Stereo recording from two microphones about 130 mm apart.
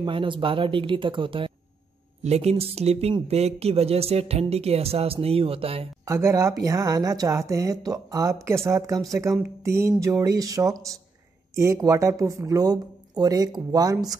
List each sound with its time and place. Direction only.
0.0 s speech: 40° right (ahead or behind)
2.2 s speech: 55° right (ahead or behind)
6.0 s speech: 25° right (ahead or behind)